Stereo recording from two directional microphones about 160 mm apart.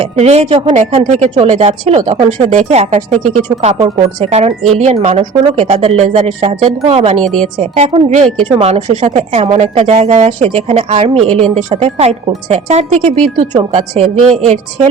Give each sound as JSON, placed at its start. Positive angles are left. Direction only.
{"t": 0.0, "sound": "a woman's voice", "side_deg": -40}
{"t": 2.5, "sound": "a woman's voice", "side_deg": -45}
{"t": 7.2, "sound": "a woman's voice", "side_deg": 5}
{"t": 7.6, "sound": "a woman's voice", "side_deg": -40}
{"t": 13.6, "sound": "a woman's voice", "side_deg": -35}